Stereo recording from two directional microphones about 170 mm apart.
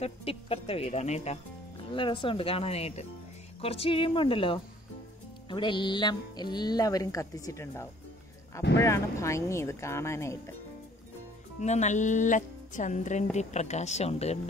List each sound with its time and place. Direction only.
0.0 s speech: 35° left (ahead or behind)
1.9 s speech: 30° left (ahead or behind)
11.6 s speech: 45° left (ahead or behind)